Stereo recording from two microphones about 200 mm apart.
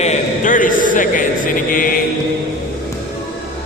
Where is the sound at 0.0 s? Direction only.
35° left (ahead or behind).